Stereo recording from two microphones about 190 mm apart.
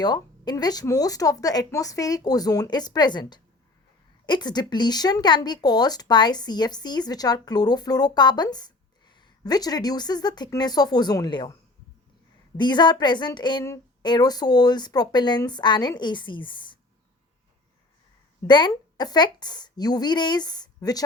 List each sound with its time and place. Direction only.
0.0 s speech: 20° left (ahead or behind)
12.5 s speech: 25° left (ahead or behind)
18.4 s speech: 25° left (ahead or behind)